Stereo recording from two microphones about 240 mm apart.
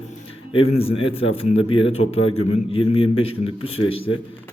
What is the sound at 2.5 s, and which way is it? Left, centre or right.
A man's voice, left.